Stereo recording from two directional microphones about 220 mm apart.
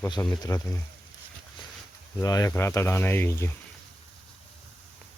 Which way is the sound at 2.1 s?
15° left (ahead or behind).